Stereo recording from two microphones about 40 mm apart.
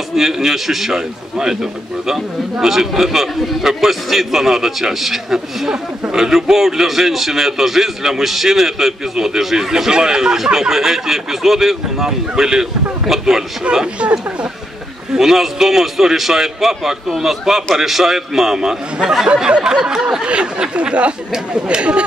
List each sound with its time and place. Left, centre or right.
0.1 s a man's voice: centre
15.1 s a man's voice: centre; by 22.0 s right